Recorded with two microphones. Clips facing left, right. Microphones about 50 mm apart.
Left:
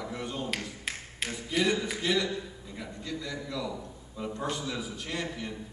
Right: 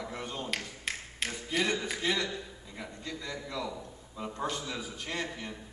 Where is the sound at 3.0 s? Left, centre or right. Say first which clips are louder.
Left 3 dB; right.